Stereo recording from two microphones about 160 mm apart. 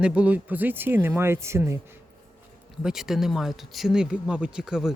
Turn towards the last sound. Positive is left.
turn(degrees=-5)  # may be behind; listen again after turning